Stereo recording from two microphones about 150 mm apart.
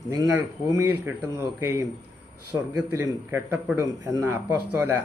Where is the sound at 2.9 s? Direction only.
20° right (ahead or behind).